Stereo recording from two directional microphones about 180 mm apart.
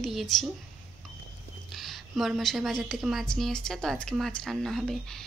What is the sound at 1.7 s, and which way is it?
A woman's voice, centre (ahead or behind).